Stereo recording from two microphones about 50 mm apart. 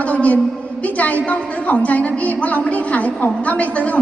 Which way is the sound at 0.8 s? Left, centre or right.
Left.